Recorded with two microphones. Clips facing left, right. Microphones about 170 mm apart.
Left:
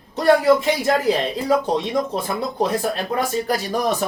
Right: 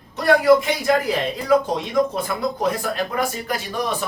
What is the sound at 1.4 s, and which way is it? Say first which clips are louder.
A man's voice: right 2 dB; 30° left (ahead or behind).